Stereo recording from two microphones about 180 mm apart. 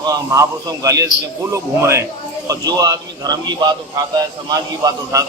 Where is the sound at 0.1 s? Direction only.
20° right (ahead or behind).